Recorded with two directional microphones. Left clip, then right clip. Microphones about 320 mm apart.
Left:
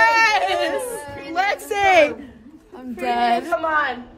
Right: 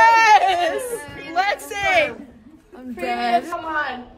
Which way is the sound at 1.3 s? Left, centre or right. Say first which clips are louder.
Even; centre.